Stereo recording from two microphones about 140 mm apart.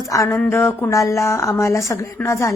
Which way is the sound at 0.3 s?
15° left (ahead or behind).